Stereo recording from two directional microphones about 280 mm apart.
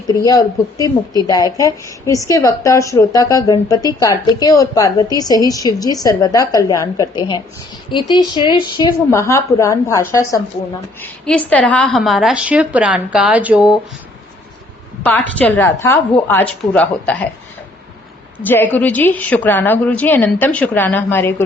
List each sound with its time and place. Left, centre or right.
0.1 s a woman's voice: centre
15.0 s a woman's voice: centre
18.4 s speech: centre